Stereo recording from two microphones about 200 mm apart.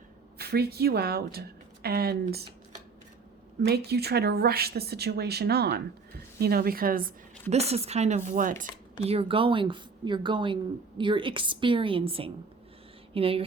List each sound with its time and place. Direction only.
0.3 s a woman's voice: 50° right (ahead or behind)
3.6 s speech: 55° right (ahead or behind)
7.5 s speech: 30° right (ahead or behind)
9.0 s a woman's voice: 30° right (ahead or behind)